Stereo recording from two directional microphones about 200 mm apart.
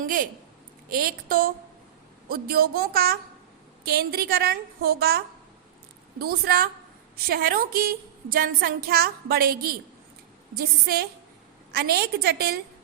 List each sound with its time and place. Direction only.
0.0 s a sound: 45° right (ahead or behind)
0.9 s a woman's voice: 45° right (ahead or behind)
10.6 s a woman's voice: 50° right (ahead or behind)